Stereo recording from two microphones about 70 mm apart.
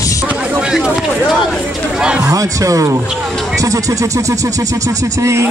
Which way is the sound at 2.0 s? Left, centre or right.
Centre.